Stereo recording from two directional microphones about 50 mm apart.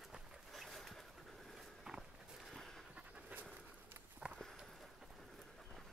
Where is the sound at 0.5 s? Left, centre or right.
Centre.